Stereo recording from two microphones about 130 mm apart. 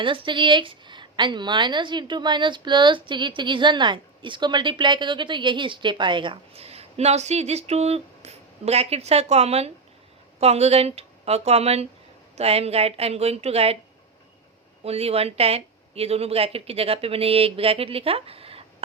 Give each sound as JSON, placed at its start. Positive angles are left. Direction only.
{"t": 0.0, "sound": "a woman's voice", "side_deg": -40}
{"t": 14.8, "sound": "speech", "side_deg": -50}